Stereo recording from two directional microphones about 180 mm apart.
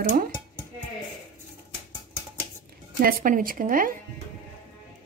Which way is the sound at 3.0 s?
55° right (ahead or behind).